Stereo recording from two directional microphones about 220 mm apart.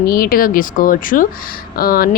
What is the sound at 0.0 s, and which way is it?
Speech, 40° left (ahead or behind).